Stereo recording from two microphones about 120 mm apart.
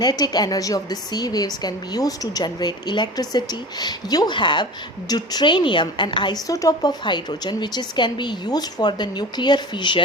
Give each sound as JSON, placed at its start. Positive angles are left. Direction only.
{"t": 0.0, "sound": "a woman's voice", "side_deg": 35}